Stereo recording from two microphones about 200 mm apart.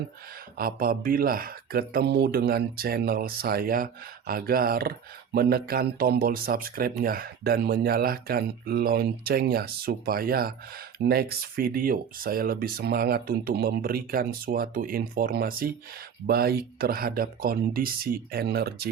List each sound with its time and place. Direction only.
0.5 s speech: 50° right (ahead or behind)